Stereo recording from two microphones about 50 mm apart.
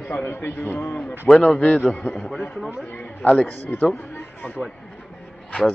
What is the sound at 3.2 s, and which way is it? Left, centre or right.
Speech, left.